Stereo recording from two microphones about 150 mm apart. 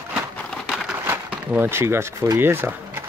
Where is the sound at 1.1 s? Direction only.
15° right (ahead or behind).